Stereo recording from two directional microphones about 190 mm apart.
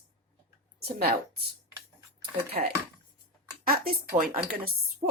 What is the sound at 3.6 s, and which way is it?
Speech, 50° right (ahead or behind).